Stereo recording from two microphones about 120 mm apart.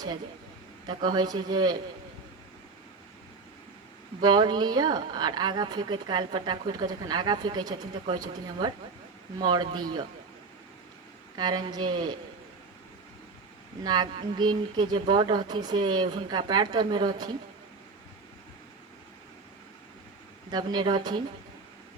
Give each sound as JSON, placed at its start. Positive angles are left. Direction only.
{"t": 0.9, "sound": "speech", "side_deg": -35}
{"t": 4.2, "sound": "speech", "side_deg": -35}
{"t": 11.3, "sound": "speech", "side_deg": -35}
{"t": 13.8, "sound": "speech", "side_deg": -35}
{"t": 20.5, "sound": "speech", "side_deg": -35}